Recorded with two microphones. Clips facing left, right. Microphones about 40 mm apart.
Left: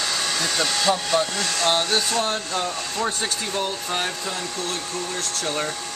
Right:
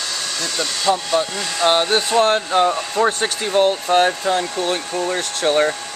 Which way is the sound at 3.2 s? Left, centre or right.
Right.